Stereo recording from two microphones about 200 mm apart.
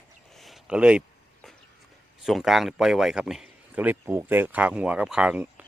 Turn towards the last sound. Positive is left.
turn(degrees=-5)  # may be behind; listen again after turning